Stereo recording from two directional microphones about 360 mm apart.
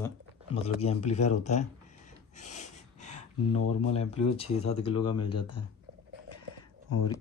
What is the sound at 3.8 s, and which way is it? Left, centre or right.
Speech, centre.